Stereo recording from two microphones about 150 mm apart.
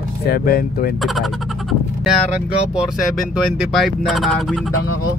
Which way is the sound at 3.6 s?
Centre (ahead or behind).